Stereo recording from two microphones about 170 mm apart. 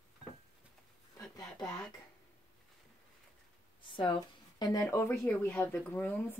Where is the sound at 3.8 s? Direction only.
30° left (ahead or behind).